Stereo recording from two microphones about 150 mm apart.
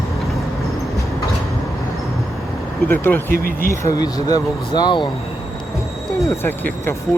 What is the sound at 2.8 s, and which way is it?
Speech, 10° left (ahead or behind).